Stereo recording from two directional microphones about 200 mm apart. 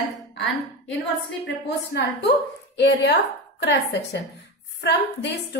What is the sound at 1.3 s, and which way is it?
A woman's voice, 60° left (ahead or behind).